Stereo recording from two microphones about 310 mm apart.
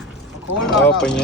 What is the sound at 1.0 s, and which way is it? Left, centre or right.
Speech, centre.